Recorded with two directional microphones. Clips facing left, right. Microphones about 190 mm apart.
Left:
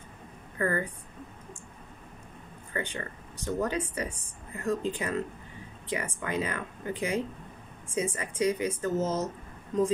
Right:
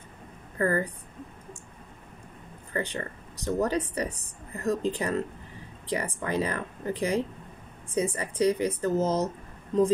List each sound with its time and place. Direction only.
0.6 s a woman's voice: 35° right (ahead or behind)
2.7 s speech: 35° right (ahead or behind)